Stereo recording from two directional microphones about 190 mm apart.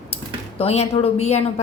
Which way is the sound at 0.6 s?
30° left (ahead or behind).